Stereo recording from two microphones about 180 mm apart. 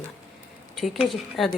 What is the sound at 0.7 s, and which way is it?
Speech, centre (ahead or behind).